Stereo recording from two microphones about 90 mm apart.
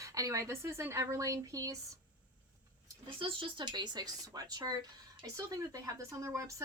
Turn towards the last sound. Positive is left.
turn(degrees=-35)  # may be behind; listen again after turning